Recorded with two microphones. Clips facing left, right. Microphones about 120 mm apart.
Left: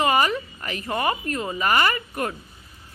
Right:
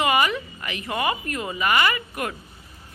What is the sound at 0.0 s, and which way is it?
Speech, 35° left (ahead or behind).